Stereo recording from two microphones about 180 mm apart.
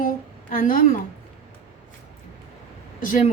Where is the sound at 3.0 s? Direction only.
50° left (ahead or behind).